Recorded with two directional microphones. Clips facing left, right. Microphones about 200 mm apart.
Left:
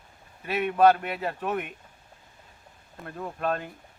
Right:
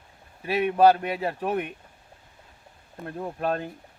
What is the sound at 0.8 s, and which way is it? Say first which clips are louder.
Speech: right 1 dB; 35° right (ahead or behind).